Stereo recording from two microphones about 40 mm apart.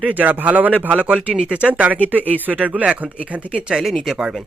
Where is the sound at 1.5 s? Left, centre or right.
Right.